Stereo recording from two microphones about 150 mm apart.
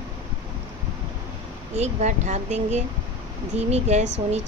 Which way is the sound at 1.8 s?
50° right (ahead or behind).